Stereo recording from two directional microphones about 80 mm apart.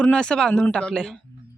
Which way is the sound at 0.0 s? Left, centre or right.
Centre.